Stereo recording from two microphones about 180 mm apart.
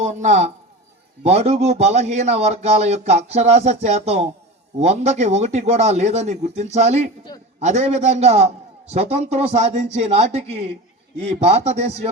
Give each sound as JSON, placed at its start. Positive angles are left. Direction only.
{"t": 0.0, "sound": "speech", "side_deg": -40}